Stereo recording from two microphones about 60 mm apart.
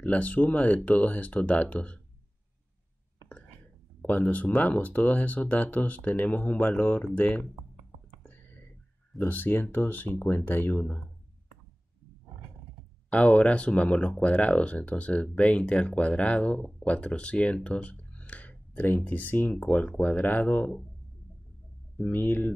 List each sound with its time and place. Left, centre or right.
0.0 s speech: left
4.0 s speech: left
8.2 s whispering: left
9.2 s speech: left
13.1 s speech: left
22.0 s speech: left